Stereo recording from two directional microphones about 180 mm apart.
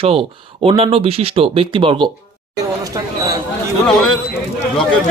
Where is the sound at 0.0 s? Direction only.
30° right (ahead or behind).